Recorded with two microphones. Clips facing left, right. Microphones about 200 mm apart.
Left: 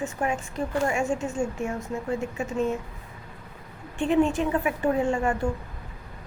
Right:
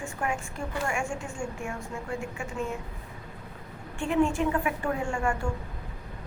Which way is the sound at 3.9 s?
20° left (ahead or behind).